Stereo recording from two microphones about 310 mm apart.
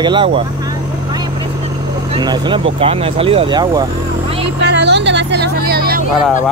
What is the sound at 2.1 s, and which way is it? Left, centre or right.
Speech, centre.